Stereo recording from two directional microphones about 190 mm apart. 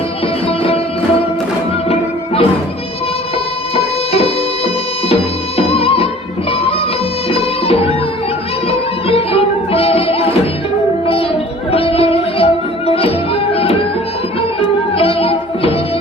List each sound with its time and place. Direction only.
0.4 s music: 30° left (ahead or behind)
1.9 s music: 30° left (ahead or behind)
3.8 s music: 30° left (ahead or behind)
9.0 s music: 30° left (ahead or behind)
14.9 s music: 30° left (ahead or behind)